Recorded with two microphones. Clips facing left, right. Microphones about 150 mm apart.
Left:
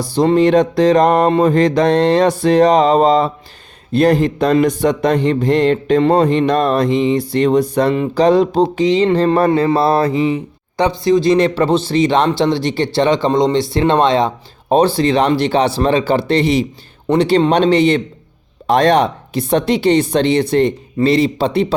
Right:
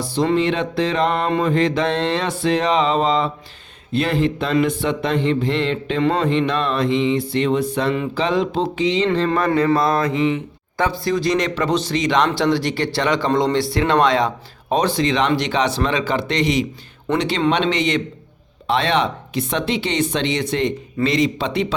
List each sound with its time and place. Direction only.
0.2 s speech: 40° left (ahead or behind)
10.8 s speech: 20° left (ahead or behind)